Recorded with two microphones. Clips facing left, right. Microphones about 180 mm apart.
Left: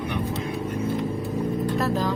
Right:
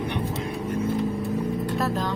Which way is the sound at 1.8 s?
Centre (ahead or behind).